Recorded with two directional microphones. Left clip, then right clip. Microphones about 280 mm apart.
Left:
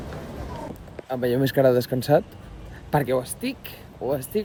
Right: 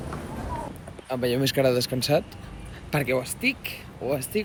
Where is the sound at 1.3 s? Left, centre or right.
Left.